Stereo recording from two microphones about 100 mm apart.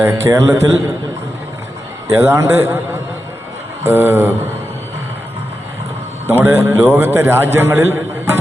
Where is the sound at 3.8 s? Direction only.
25° right (ahead or behind).